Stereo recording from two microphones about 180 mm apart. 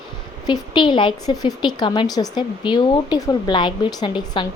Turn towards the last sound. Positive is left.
turn(degrees=25)  # may be behind; listen again after turning